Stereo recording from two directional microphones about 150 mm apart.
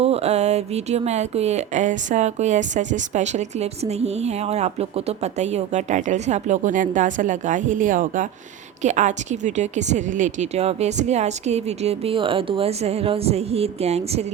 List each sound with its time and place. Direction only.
0.0 s speech: 45° right (ahead or behind)